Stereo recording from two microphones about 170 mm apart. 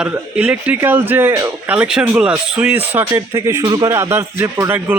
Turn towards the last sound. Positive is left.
turn(degrees=-15)  # may be behind; listen again after turning